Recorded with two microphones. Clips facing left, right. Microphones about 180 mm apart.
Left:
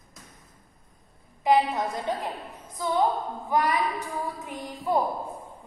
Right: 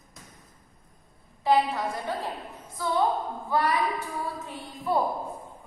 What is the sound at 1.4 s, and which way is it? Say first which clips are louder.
A woman's voice: left 1 dB; 20° left (ahead or behind).